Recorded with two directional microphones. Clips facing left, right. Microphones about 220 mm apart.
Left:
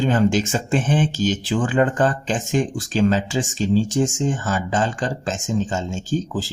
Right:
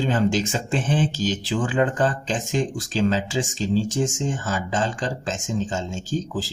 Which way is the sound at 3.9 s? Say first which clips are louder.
Left 4 dB; 50° left (ahead or behind).